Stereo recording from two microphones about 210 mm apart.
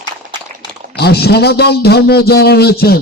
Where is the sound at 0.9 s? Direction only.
50° left (ahead or behind).